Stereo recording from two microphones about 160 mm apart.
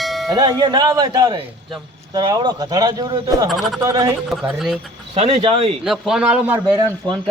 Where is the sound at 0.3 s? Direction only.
25° right (ahead or behind).